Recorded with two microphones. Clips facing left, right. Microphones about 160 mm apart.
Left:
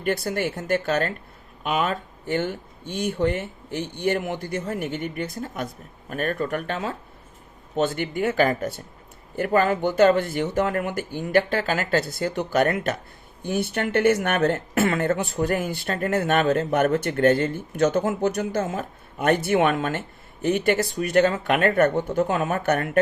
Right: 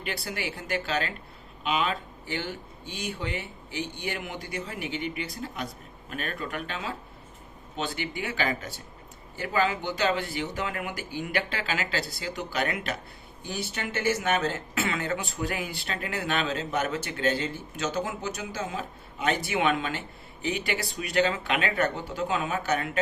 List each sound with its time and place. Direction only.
0.0 s speech: 45° left (ahead or behind)